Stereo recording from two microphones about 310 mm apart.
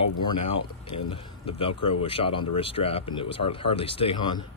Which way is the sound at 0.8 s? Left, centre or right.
Centre.